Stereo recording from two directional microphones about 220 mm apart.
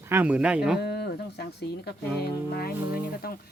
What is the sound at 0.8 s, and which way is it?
Speech, 45° left (ahead or behind).